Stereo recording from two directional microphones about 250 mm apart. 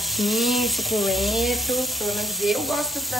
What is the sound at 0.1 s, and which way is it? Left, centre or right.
Speech, centre.